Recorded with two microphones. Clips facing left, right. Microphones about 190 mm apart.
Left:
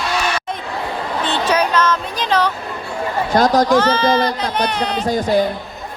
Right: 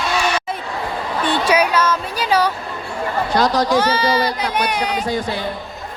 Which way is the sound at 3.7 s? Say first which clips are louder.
Left 2 dB; 10° right (ahead or behind).